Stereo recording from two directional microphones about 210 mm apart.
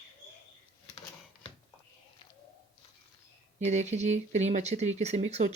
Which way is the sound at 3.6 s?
35° right (ahead or behind).